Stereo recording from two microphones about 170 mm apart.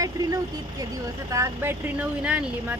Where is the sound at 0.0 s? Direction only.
20° right (ahead or behind).